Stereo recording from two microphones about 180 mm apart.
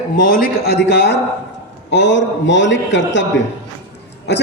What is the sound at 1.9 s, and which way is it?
A man's voice, 80° left.